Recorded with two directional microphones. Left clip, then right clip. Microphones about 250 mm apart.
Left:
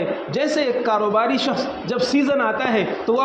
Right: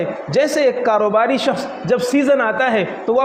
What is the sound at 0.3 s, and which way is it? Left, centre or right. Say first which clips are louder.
A man's voice: right 6 dB; right.